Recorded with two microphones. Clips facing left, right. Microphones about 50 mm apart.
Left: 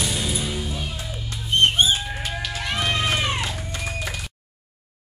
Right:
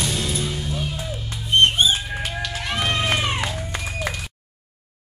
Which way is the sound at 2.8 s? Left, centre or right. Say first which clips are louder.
Right 1 dB; centre.